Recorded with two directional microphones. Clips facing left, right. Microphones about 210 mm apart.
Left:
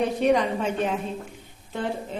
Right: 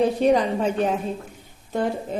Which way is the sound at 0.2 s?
35° right (ahead or behind).